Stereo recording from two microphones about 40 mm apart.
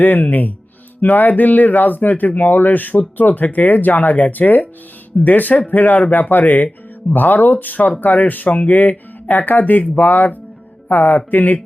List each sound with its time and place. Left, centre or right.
0.0 s speech: left